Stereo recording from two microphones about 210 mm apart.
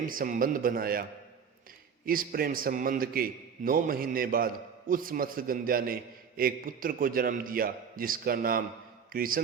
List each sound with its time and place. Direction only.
0.0 s a man's voice: 40° right (ahead or behind)
2.0 s a man's voice: 45° right (ahead or behind)